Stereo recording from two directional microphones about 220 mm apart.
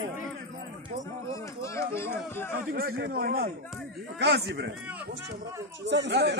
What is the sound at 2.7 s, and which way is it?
Speech, 45° right (ahead or behind).